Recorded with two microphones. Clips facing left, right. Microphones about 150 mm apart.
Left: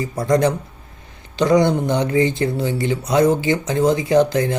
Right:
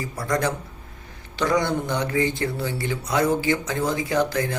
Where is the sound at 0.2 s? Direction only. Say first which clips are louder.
Left 8 dB; 20° left (ahead or behind).